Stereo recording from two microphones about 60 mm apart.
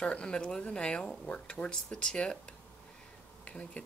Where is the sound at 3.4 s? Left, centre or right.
Centre.